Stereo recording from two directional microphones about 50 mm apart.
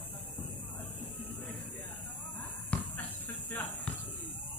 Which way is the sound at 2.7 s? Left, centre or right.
Left.